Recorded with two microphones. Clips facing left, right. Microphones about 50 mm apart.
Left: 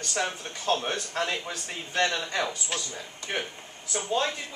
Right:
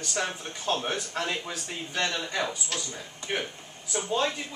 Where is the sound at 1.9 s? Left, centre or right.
Centre.